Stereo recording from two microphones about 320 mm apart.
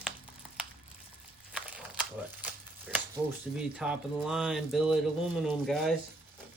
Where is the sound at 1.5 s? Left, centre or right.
Centre.